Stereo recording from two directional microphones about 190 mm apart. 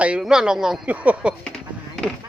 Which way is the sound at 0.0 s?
5° right (ahead or behind).